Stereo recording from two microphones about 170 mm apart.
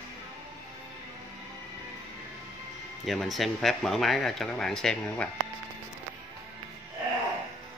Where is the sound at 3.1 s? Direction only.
Centre (ahead or behind).